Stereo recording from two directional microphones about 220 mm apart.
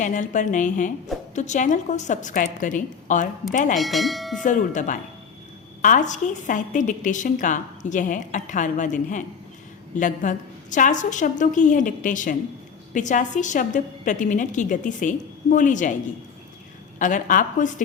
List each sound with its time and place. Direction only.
0.0 s a woman's voice: 35° left (ahead or behind)
3.8 s speech: centre (ahead or behind)
4.4 s a woman's voice: 35° left (ahead or behind)
17.0 s a woman's voice: 35° left (ahead or behind)